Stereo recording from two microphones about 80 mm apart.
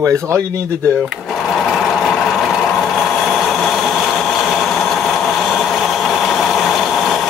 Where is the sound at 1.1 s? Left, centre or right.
Centre.